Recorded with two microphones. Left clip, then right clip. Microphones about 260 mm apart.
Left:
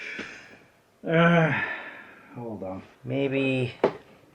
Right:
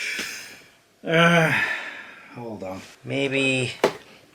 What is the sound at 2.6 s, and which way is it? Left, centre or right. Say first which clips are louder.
Speech: right 2 dB; centre.